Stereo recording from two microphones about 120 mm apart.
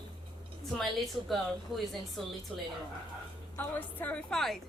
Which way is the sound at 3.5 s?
15° left (ahead or behind).